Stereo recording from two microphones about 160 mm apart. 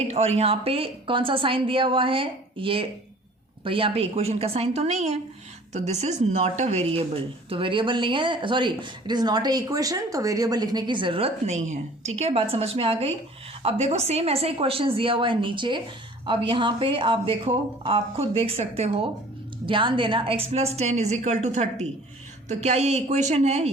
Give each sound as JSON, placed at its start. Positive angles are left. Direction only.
{"t": 0.1, "sound": "a woman's voice", "side_deg": -40}